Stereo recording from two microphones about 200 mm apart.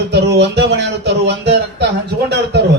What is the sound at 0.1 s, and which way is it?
Music, 55° right (ahead or behind).